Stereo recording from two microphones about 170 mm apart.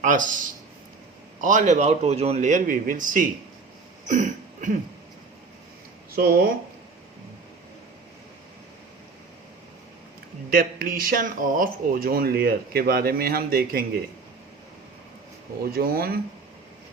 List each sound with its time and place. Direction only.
0.0 s a man's voice: 50° right (ahead or behind)
4.1 s a sound: 45° right (ahead or behind)
6.1 s speech: 60° right (ahead or behind)
10.5 s speech: 60° right (ahead or behind)
15.7 s speech: 60° right (ahead or behind)